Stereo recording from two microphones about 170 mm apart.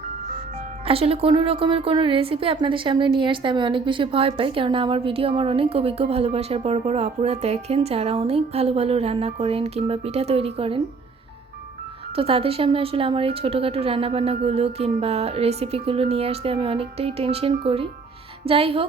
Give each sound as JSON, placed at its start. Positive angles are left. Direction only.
{"t": 0.9, "sound": "a woman's voice", "side_deg": -35}
{"t": 12.1, "sound": "a woman's voice", "side_deg": -35}